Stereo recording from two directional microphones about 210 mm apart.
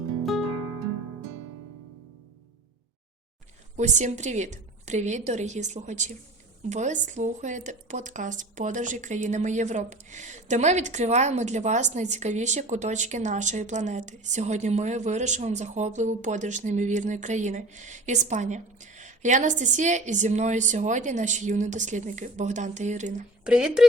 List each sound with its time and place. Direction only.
3.8 s speech: 35° right (ahead or behind)
23.4 s speech: 5° right (ahead or behind)